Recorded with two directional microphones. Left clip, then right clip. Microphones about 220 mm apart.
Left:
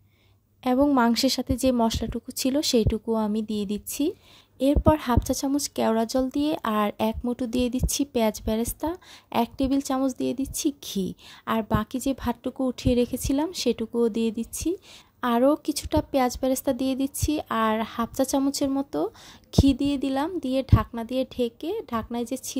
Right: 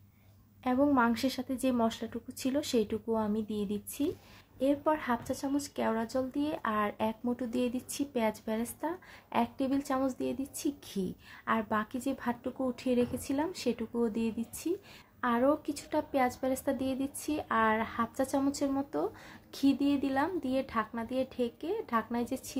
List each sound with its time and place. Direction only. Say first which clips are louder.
0.7 s a woman's voice: left 6 dB; 45° left (ahead or behind)